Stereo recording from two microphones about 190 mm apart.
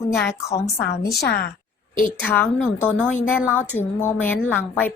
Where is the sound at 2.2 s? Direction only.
10° left (ahead or behind).